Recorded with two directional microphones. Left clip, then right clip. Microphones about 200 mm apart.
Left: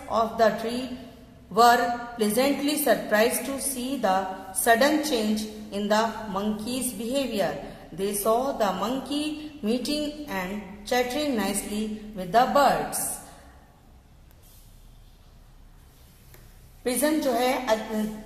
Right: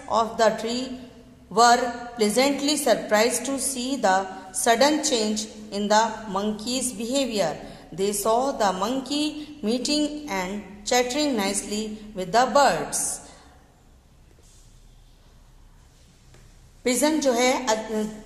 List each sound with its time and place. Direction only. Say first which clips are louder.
0.1 s a woman's voice: right 1 dB; 30° right (ahead or behind)
16.8 s a woman's voice: right 3 dB; 35° right (ahead or behind)